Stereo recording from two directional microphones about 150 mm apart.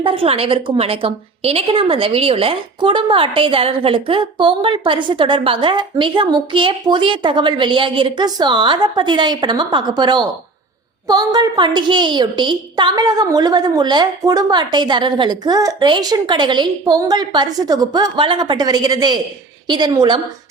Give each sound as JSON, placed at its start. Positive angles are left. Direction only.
{"t": 0.0, "sound": "a woman's voice", "side_deg": -35}